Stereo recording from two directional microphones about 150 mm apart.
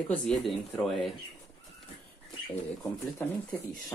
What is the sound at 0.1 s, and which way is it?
Speech, centre (ahead or behind).